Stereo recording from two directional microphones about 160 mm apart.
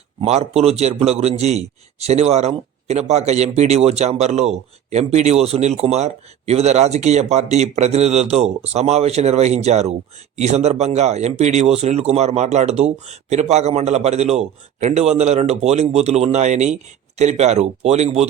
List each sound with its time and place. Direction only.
0.2 s a man's voice: 40° right (ahead or behind)